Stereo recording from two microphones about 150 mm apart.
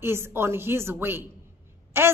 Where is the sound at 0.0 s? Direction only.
15° right (ahead or behind).